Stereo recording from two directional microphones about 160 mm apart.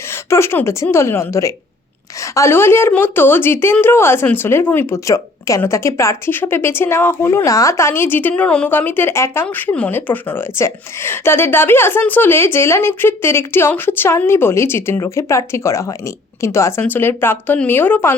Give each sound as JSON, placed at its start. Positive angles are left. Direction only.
{"t": 0.1, "sound": "a woman's voice", "side_deg": 15}